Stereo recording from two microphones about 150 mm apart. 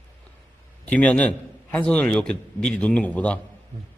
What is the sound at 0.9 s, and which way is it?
Speech, 10° left (ahead or behind).